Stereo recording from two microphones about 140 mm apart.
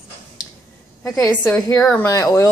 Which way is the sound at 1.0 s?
25° left (ahead or behind).